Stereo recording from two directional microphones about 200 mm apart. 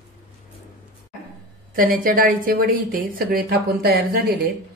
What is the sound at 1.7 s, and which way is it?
A woman's voice, 45° right (ahead or behind).